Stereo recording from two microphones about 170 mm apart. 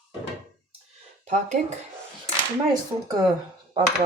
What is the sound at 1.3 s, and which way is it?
Speech, 45° right (ahead or behind).